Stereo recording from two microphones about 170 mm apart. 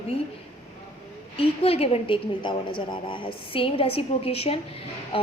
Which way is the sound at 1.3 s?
35° left (ahead or behind).